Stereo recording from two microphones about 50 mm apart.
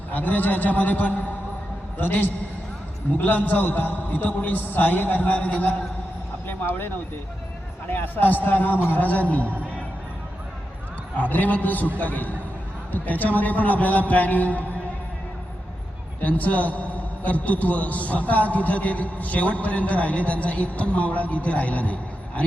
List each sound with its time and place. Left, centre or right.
0.1 s a man's voice: left
6.5 s a sound: left
7.9 s a man's voice: left
11.2 s a man's voice: left
16.2 s a man's voice: left